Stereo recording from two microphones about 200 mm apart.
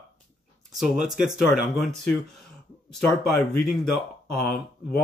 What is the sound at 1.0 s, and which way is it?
Speech, 40° right (ahead or behind).